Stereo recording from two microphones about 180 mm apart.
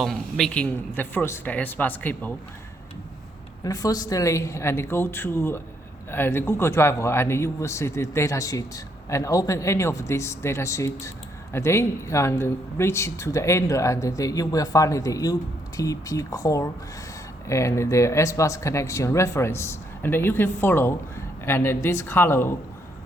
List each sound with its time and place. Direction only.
0.0 s speech: centre (ahead or behind)
3.6 s speech: 20° left (ahead or behind)